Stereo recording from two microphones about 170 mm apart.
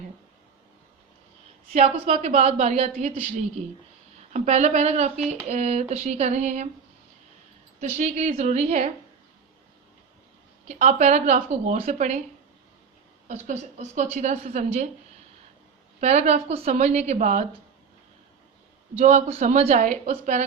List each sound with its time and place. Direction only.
1.7 s a woman's voice: 40° right (ahead or behind)
7.8 s a woman's voice: 45° right (ahead or behind)
10.7 s a woman's voice: 45° right (ahead or behind)
13.2 s a woman's voice: 45° right (ahead or behind)
16.0 s a woman's voice: 40° right (ahead or behind)
18.9 s a woman's voice: 40° right (ahead or behind)